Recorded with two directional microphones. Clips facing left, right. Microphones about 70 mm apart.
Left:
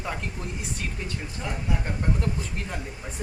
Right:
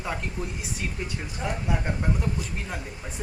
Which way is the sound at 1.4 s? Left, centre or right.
Centre.